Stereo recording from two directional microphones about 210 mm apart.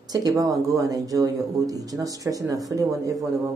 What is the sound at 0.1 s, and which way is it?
Speech, 15° right (ahead or behind).